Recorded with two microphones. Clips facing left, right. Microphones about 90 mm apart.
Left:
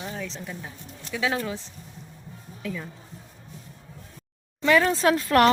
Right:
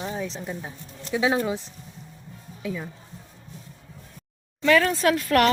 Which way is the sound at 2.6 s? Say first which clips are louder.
Right 2 dB; 10° right (ahead or behind).